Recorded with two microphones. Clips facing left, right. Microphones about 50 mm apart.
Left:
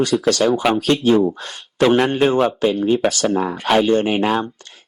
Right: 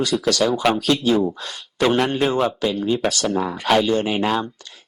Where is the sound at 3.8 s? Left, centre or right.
Left.